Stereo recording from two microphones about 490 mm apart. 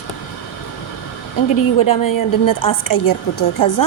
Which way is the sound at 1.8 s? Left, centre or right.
Left.